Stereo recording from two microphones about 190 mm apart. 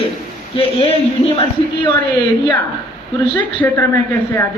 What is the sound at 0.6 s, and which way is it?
Speech, 30° left (ahead or behind).